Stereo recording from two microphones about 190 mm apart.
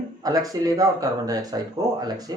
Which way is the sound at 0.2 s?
20° right (ahead or behind).